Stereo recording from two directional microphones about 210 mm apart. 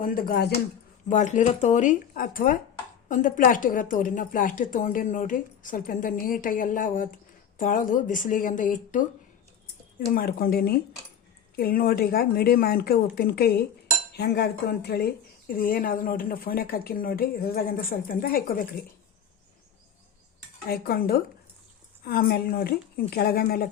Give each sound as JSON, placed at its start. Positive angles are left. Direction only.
{"t": 0.0, "sound": "speech", "side_deg": 45}
{"t": 1.0, "sound": "a woman's voice", "side_deg": 35}
{"t": 10.1, "sound": "speech", "side_deg": 45}
{"t": 20.7, "sound": "speech", "side_deg": 45}